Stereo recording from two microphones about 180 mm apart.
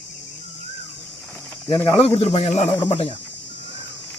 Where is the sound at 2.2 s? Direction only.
35° left (ahead or behind).